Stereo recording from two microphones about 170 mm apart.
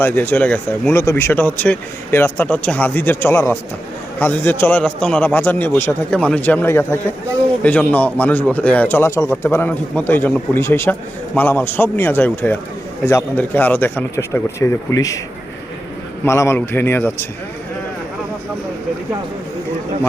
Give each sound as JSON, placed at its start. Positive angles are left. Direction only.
{"t": 0.0, "sound": "speech", "side_deg": 10}
{"t": 16.2, "sound": "speech", "side_deg": 15}